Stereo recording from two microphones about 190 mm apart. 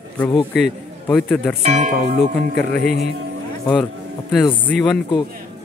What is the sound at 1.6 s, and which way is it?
Speech, 35° right (ahead or behind).